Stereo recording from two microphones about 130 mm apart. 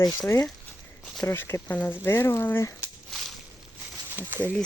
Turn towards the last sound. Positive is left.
turn(degrees=-15)  # may be behind; listen again after turning